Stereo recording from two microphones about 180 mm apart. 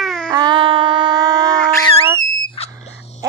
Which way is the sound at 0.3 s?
20° right (ahead or behind).